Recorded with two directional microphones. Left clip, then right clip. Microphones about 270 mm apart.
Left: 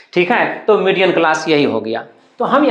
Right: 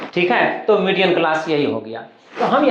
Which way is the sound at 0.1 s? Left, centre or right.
Left.